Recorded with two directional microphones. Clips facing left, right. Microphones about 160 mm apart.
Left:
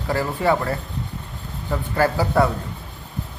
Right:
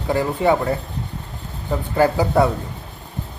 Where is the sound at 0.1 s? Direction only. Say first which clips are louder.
Right 3 dB; 20° right (ahead or behind).